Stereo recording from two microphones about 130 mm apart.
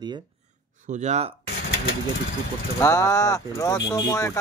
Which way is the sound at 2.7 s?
25° left (ahead or behind).